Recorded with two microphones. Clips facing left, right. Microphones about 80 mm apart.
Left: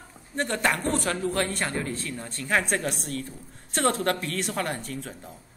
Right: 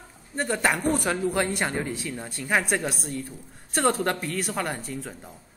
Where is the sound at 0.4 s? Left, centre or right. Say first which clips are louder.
Right 1 dB; centre.